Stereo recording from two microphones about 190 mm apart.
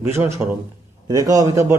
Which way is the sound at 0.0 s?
10° right (ahead or behind).